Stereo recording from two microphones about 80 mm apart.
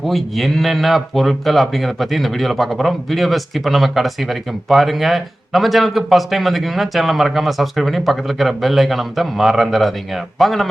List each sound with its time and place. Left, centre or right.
0.0 s speech: centre